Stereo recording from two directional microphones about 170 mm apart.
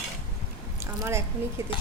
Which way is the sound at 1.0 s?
15° right (ahead or behind).